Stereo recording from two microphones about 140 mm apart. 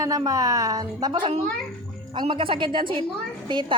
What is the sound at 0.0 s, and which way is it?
A woman's voice, 25° right (ahead or behind).